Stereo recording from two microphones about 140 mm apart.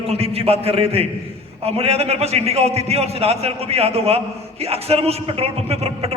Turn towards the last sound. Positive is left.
turn(degrees=-45)  # may be behind; listen again after turning